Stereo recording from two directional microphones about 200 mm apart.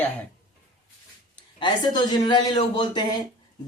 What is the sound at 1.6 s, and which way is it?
A man's voice, 25° left (ahead or behind).